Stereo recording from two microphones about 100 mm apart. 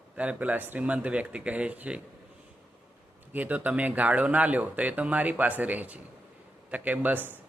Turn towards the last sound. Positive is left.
turn(degrees=-20)  # may be behind; listen again after turning